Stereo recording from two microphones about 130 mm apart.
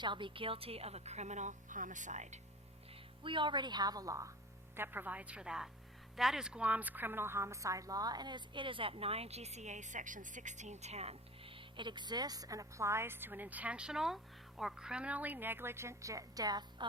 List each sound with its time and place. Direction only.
0.0 s a woman's voice: 40° right (ahead or behind); by 2.4 s 70° right (ahead or behind)
3.2 s a woman's voice: 40° right (ahead or behind)
4.8 s a woman's voice: 15° right (ahead or behind); by 16.8 s 30° right (ahead or behind)